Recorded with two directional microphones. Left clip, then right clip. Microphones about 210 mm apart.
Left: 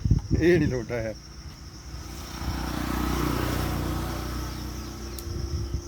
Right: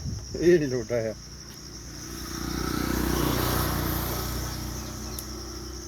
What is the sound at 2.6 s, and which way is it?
Vehicle, 20° left (ahead or behind).